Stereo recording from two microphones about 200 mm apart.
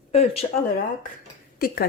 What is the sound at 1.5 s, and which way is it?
Speech, 50° left (ahead or behind).